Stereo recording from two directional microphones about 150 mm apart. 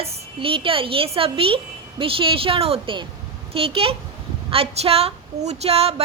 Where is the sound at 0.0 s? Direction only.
40° right (ahead or behind).